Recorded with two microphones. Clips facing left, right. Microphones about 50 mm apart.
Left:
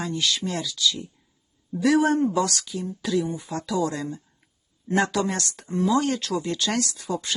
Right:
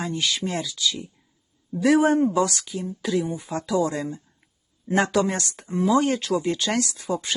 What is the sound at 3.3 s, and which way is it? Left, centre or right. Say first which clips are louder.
Speech: right 3 dB; right.